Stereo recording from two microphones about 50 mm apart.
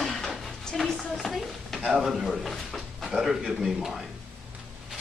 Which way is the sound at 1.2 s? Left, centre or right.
Centre.